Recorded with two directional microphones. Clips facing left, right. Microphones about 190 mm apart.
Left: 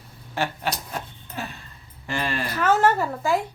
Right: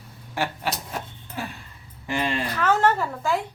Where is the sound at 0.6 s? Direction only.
5° right (ahead or behind).